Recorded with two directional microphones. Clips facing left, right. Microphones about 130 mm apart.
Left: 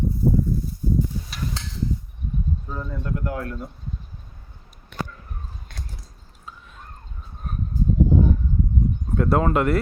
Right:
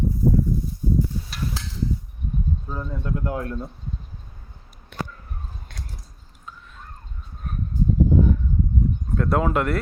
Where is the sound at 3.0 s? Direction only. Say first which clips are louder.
Right 1 dB; 20° right (ahead or behind).